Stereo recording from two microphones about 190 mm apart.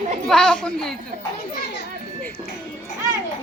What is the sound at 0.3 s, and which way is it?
Speech, 5° left (ahead or behind).